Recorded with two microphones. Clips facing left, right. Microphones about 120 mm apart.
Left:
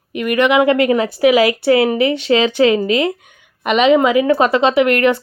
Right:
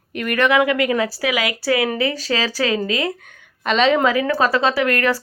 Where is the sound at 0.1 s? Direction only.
10° left (ahead or behind).